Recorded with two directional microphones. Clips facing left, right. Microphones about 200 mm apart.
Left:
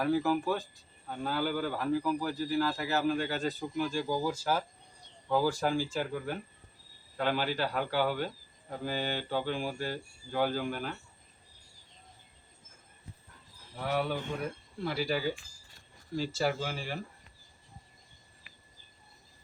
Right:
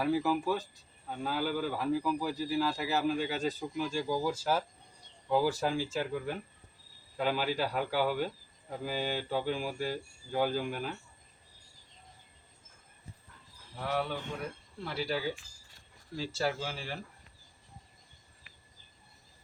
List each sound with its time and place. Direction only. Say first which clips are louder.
0.0 s a man's voice: left 1 dB; 5° right (ahead or behind)
13.9 s speech: left 2 dB; 5° left (ahead or behind)
16.4 s speech: even; centre (ahead or behind)